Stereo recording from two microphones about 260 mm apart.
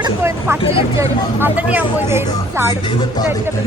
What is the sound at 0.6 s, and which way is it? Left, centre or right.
Speech, left.